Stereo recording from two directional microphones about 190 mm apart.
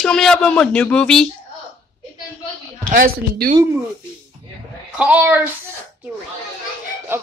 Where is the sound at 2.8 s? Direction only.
50° right (ahead or behind).